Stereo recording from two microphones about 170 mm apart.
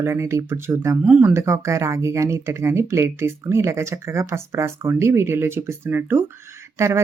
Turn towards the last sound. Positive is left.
turn(degrees=-15)  # may be behind; listen again after turning